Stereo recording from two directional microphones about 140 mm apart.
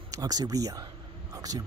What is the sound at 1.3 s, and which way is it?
Whispering, 25° right (ahead or behind).